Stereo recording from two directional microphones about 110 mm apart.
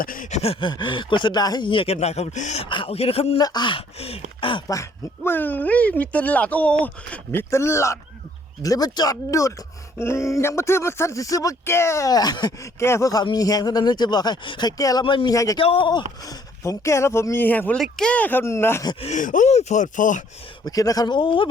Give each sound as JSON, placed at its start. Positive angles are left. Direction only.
{"t": 0.3, "sound": "speech", "side_deg": 75}
{"t": 2.0, "sound": "speech", "side_deg": 80}
{"t": 2.6, "sound": "speech", "side_deg": 50}
{"t": 3.3, "sound": "speech", "side_deg": 40}
{"t": 4.4, "sound": "speech", "side_deg": 50}
{"t": 4.7, "sound": "speech", "side_deg": 25}
{"t": 12.8, "sound": "speech", "side_deg": 25}
{"t": 15.0, "sound": "speech", "side_deg": 45}
{"t": 15.3, "sound": "speech", "side_deg": 30}
{"t": 15.5, "sound": "speech", "side_deg": 55}
{"t": 16.2, "sound": "speech", "side_deg": 30}
{"t": 17.7, "sound": "speech", "side_deg": 5}
{"t": 18.9, "sound": "speech", "side_deg": 80}
{"t": 20.7, "sound": "speech", "side_deg": 35}